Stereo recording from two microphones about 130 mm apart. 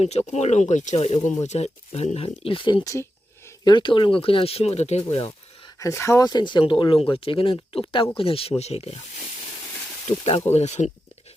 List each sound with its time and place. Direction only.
0.0 s speech: 55° left (ahead or behind)
2.8 s speech: 25° left (ahead or behind)
3.6 s speech: 35° left (ahead or behind); by 5.0 s 55° left (ahead or behind)
5.8 s speech: 20° left (ahead or behind)
6.2 s speech: 35° left (ahead or behind); by 9.0 s 55° left (ahead or behind)
10.1 s speech: 50° left (ahead or behind)